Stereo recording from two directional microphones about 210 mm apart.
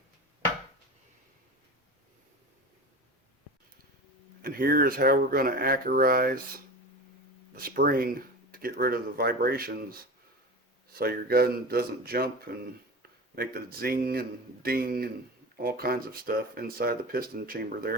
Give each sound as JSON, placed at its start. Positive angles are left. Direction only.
{"t": 4.4, "sound": "speech", "side_deg": -45}
{"t": 7.5, "sound": "speech", "side_deg": -45}
{"t": 10.9, "sound": "speech", "side_deg": -45}
{"t": 13.3, "sound": "speech", "side_deg": -45}